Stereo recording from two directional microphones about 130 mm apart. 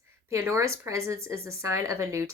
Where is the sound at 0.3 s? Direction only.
20° right (ahead or behind).